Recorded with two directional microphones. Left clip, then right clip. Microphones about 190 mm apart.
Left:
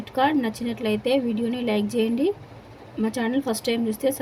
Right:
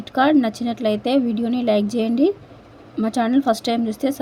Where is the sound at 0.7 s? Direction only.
20° right (ahead or behind).